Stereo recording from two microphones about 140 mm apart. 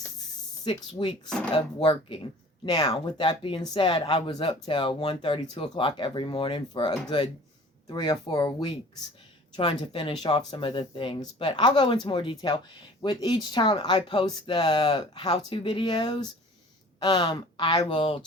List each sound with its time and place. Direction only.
0.6 s speech: 35° left (ahead or behind)